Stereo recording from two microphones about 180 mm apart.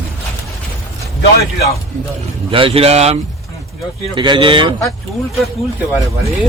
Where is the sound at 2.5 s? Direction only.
30° right (ahead or behind).